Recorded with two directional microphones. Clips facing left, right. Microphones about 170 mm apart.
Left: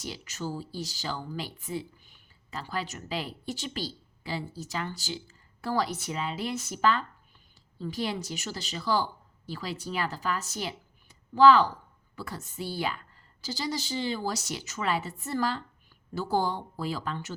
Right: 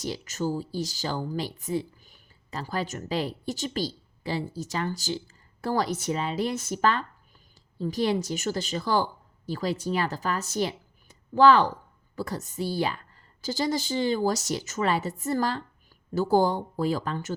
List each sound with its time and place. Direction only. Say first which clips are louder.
0.0 s a woman's voice: right 7 dB; 45° right (ahead or behind)
13.4 s speech: right 6 dB; 50° right (ahead or behind)